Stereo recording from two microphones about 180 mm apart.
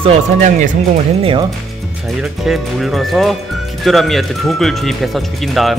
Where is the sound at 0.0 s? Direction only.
35° right (ahead or behind).